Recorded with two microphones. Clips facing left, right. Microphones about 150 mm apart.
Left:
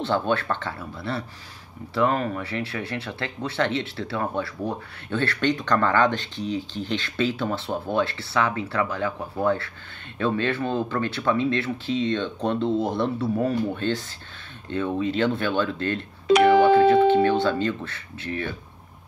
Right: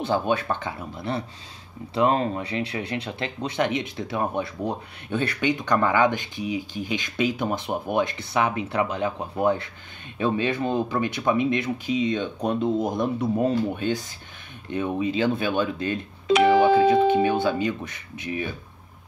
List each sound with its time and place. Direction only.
0.0 s speech: 15° right (ahead or behind)
16.3 s speech: 60° left (ahead or behind)
16.7 s speech: 15° right (ahead or behind)